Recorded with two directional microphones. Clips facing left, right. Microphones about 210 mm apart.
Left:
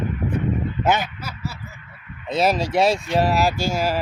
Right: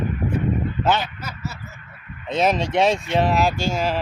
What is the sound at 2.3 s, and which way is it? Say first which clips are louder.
Speech: even; centre (ahead or behind).